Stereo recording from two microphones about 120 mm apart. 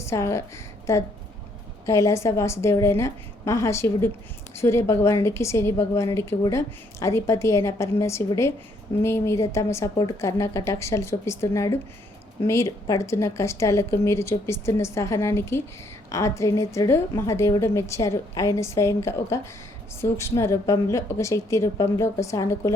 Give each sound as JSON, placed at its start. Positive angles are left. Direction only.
{"t": 0.0, "sound": "a woman's voice", "side_deg": 25}
{"t": 1.9, "sound": "a woman's voice", "side_deg": 25}